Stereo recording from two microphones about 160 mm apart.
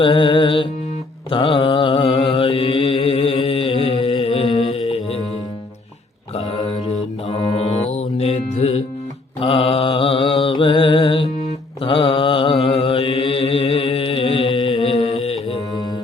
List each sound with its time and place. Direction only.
0.0 s music: 30° left (ahead or behind)
1.3 s mantra: 35° left (ahead or behind)
7.5 s music: 40° left (ahead or behind)
9.4 s mantra: 35° left (ahead or behind)